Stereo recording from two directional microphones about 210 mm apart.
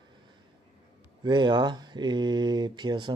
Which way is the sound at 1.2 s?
20° right (ahead or behind).